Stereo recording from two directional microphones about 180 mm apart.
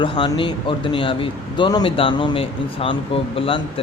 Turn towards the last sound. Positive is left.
turn(degrees=30)  # may be behind; listen again after turning